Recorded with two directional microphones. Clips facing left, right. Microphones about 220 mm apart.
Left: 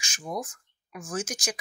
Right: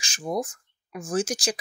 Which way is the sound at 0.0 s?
35° right (ahead or behind).